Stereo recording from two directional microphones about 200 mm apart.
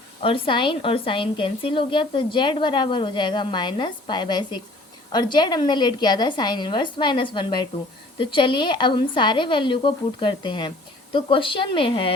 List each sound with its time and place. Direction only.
0.2 s a woman's voice: 25° left (ahead or behind)